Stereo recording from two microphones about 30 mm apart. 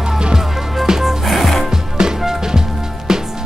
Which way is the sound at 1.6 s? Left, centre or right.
Right.